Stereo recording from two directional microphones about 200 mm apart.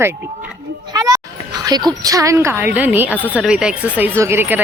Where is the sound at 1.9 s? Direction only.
15° right (ahead or behind).